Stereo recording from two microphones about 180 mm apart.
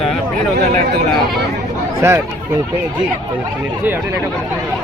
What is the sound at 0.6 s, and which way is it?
Speech, 40° right (ahead or behind).